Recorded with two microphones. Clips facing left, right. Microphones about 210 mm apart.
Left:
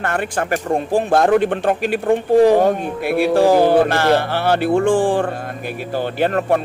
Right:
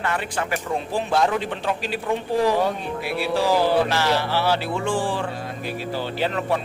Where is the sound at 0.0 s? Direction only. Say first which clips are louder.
Left 5 dB; 50° left (ahead or behind).